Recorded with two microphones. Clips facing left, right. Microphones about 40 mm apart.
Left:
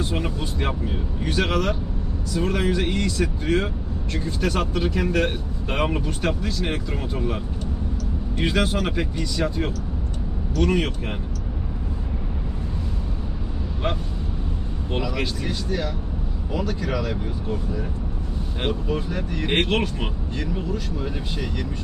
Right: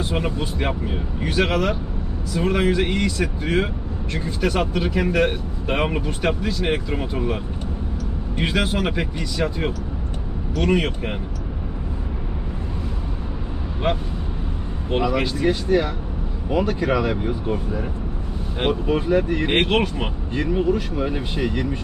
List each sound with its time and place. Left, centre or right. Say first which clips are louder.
0.0 s speech: right 2 dB; centre
13.8 s speech: right 4 dB; centre
16.5 s speech: right 6 dB; right
20.3 s speech: right 10 dB; right